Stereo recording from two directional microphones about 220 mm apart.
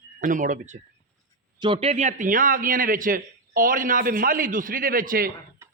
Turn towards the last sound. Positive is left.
turn(degrees=-40)  # may be behind; listen again after turning